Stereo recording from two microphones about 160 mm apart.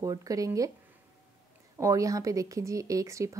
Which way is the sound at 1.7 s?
20° right (ahead or behind).